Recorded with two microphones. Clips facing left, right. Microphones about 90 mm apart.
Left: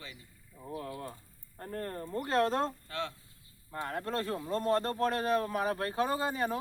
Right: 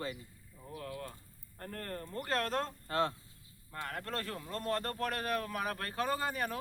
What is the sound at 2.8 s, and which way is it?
Speech, 40° right (ahead or behind).